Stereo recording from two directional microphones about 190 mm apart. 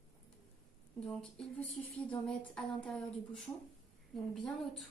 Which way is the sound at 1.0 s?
5° left (ahead or behind).